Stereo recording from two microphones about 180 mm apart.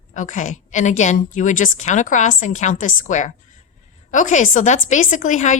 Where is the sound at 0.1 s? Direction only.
45° left (ahead or behind).